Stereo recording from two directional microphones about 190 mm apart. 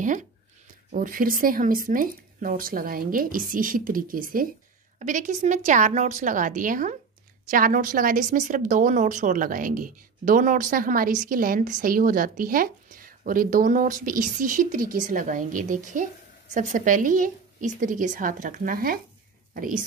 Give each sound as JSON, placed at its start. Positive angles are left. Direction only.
{"t": 0.9, "sound": "a woman's voice", "side_deg": -45}